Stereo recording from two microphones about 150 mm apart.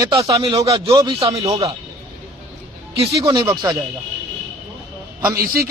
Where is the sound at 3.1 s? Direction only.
25° right (ahead or behind).